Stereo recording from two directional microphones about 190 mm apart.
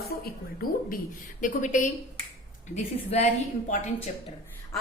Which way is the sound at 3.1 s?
35° left (ahead or behind).